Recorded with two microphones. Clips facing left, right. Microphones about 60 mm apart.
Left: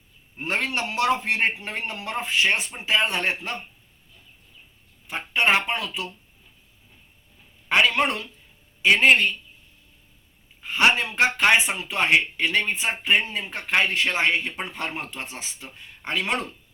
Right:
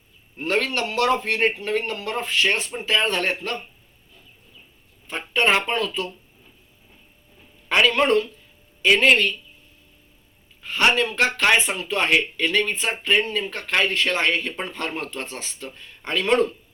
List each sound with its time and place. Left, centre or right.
0.3 s a man's voice: left
5.0 s speech: centre
7.7 s a man's voice: centre
10.6 s speech: centre